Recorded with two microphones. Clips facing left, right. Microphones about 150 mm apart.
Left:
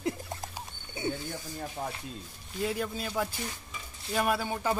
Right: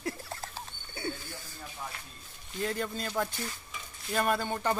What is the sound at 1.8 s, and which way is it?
Speech, 55° left (ahead or behind).